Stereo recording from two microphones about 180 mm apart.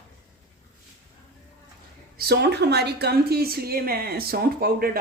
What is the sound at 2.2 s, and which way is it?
A woman's voice, 60° right (ahead or behind).